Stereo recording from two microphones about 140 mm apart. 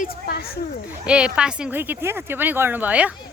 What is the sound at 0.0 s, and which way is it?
Speech, 90° left.